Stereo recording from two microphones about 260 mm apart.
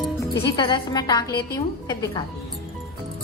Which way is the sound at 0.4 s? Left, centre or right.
Centre.